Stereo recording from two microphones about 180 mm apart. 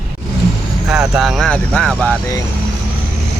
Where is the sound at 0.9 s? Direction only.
5° right (ahead or behind).